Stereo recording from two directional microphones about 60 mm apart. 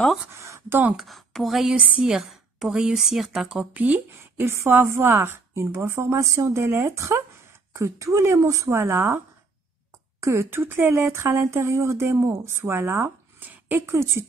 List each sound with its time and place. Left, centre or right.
0.3 s a sound: right
0.9 s speech: centre
1.8 s a woman's voice: right
3.7 s speech: right
4.5 s a woman's voice: right
5.5 s speech: right
6.6 s speech: right
10.2 s speech: right
10.5 s speech: right